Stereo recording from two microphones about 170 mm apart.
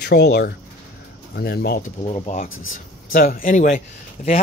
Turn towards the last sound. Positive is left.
turn(degrees=45)  # may be behind; listen again after turning